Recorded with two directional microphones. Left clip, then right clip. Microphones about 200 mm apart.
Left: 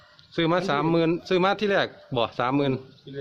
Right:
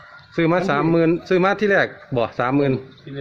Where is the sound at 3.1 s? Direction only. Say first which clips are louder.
Right 4 dB; 50° right (ahead or behind).